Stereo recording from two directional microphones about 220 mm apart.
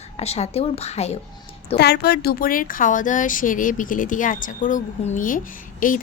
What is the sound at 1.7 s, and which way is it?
Speech, 50° left (ahead or behind).